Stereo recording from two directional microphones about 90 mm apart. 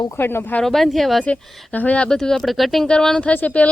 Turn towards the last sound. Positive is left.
turn(degrees=15)  # may be behind; listen again after turning